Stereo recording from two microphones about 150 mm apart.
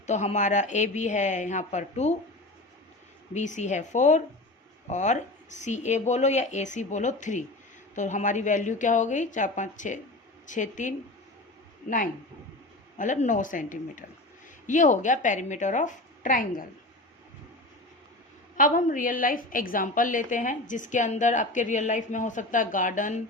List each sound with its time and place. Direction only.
0.0 s speech: 50° left (ahead or behind)
3.3 s a woman's voice: 55° left (ahead or behind)
13.0 s a woman's voice: 55° left (ahead or behind)
18.5 s a woman's voice: 60° left (ahead or behind)